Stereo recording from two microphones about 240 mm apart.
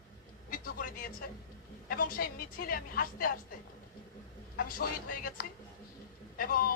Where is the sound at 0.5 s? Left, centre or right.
Left.